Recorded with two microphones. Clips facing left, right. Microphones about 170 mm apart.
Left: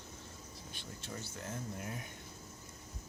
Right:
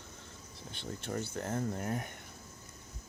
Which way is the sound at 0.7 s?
60° right (ahead or behind).